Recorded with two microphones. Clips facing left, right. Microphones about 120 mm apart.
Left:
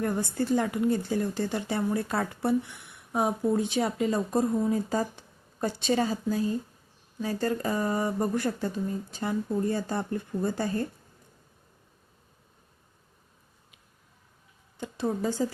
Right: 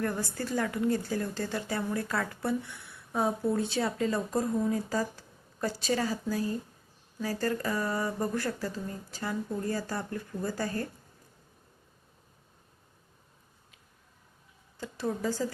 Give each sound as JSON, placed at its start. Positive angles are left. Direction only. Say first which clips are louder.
{"t": 0.0, "sound": "a woman's voice", "louder": "left 4 dB", "side_deg": 20}
{"t": 14.8, "sound": "speech", "louder": "left 3 dB", "side_deg": 20}